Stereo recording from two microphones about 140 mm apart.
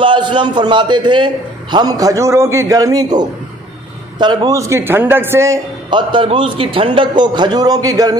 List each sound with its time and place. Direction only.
0.0 s a man's voice: 35° right (ahead or behind); by 5.6 s 20° right (ahead or behind)
5.9 s a man's voice: 35° right (ahead or behind)